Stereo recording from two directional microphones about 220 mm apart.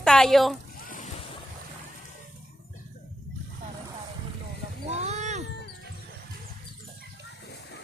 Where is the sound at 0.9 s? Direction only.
35° left (ahead or behind).